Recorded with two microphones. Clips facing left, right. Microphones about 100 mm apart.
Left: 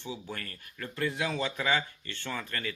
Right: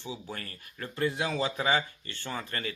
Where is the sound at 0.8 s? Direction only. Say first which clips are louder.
Right 2 dB; 30° right (ahead or behind).